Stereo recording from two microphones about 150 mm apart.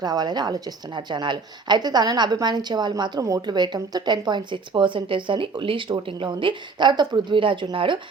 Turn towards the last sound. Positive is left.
turn(degrees=-35)  # may be behind; listen again after turning